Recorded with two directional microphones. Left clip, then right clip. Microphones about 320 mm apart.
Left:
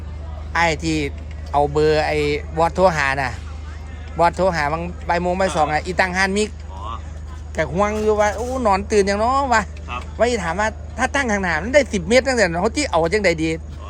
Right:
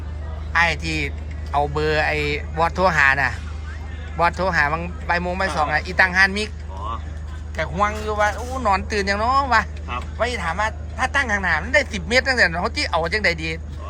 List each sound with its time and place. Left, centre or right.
0.5 s a man's voice: centre
7.5 s a man's voice: left